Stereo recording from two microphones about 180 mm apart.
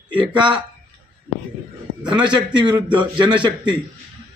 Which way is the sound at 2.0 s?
5° right (ahead or behind).